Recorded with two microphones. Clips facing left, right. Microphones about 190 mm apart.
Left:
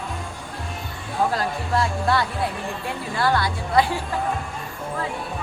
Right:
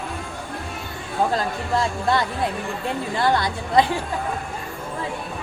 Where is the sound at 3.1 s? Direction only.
20° right (ahead or behind).